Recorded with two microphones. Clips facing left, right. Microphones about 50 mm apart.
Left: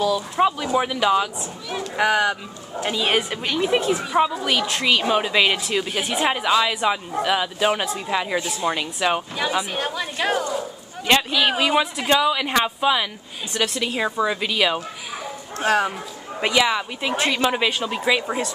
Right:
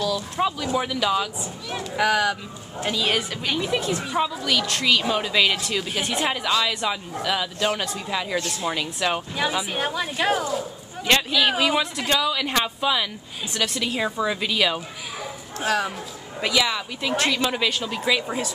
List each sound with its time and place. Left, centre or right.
0.0 s a man's voice: centre
3.9 s speech: centre
11.1 s speech: centre
12.1 s speech: centre
16.3 s speech: centre